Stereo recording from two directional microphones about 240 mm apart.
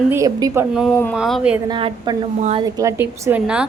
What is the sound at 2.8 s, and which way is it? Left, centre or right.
Speech, centre.